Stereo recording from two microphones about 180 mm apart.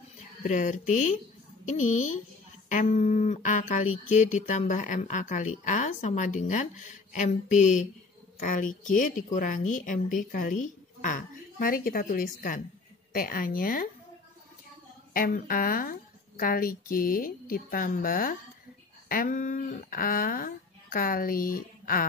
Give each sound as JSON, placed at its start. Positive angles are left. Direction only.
{"t": 0.4, "sound": "speech", "side_deg": 45}
{"t": 15.1, "sound": "speech", "side_deg": 50}